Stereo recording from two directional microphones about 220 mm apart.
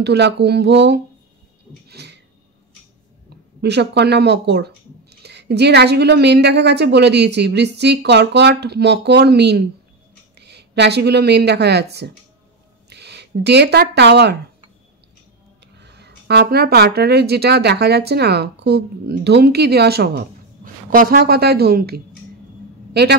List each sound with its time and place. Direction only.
0.0 s speech: 50° right (ahead or behind)
1.9 s a sound: 50° right (ahead or behind)
3.6 s speech: 50° right (ahead or behind)
15.8 s speech: 50° right (ahead or behind)